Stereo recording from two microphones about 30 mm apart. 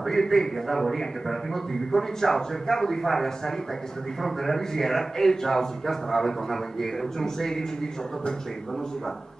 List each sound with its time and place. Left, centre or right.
0.1 s a man's voice: centre